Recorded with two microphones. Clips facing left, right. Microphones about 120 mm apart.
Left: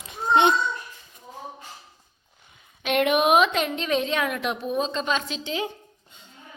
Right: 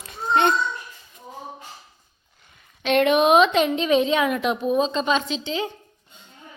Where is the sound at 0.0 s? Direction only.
15° left (ahead or behind).